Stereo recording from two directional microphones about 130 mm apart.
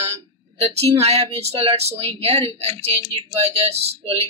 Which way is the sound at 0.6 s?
50° right (ahead or behind).